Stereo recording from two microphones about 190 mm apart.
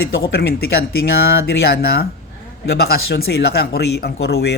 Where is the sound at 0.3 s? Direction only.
55° left (ahead or behind).